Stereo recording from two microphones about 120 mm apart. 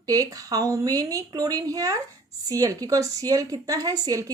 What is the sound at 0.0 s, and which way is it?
Speech, 30° right (ahead or behind).